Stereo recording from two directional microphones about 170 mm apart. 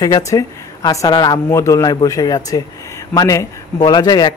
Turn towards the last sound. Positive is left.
turn(degrees=25)  # may be behind; listen again after turning